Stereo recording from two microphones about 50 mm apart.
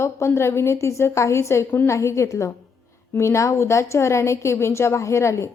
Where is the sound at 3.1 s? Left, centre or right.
Left.